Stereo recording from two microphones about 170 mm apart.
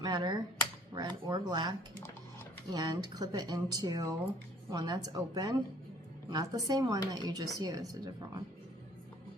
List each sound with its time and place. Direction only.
0.0 s speech: 25° right (ahead or behind)
2.7 s speech: 20° right (ahead or behind)